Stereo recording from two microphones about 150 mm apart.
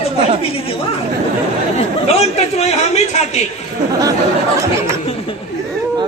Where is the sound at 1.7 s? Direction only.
45° left (ahead or behind).